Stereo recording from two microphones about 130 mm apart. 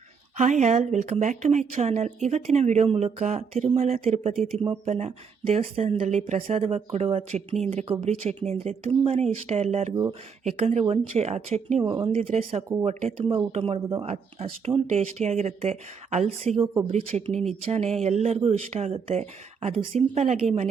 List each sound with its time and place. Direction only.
0.3 s speech: 65° right (ahead or behind)
11.8 s speech: 35° right (ahead or behind)
12.0 s speech: 50° right (ahead or behind)